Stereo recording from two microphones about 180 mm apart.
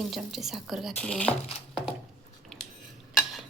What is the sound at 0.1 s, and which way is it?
A woman's voice, centre (ahead or behind).